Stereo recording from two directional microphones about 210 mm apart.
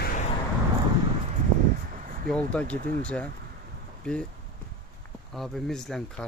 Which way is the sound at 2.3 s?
5° left (ahead or behind).